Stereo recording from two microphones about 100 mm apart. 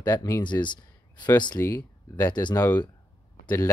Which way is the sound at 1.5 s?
25° left (ahead or behind).